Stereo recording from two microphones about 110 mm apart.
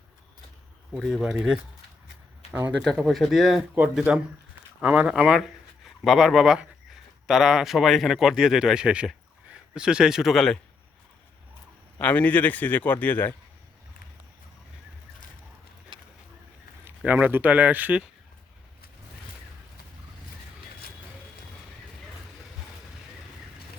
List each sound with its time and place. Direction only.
0.9 s speech: centre (ahead or behind)
2.7 s speech: centre (ahead or behind)
11.9 s a man's voice: 15° left (ahead or behind)
17.0 s speech: 15° right (ahead or behind)